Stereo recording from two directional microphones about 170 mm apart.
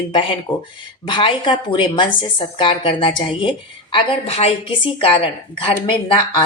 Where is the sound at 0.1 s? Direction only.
30° left (ahead or behind).